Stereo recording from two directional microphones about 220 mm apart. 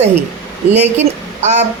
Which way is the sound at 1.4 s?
30° right (ahead or behind).